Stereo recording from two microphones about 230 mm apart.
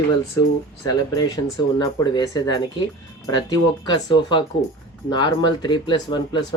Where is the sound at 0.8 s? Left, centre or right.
Centre.